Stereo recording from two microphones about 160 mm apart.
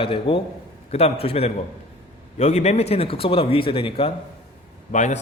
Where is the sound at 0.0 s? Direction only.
35° left (ahead or behind).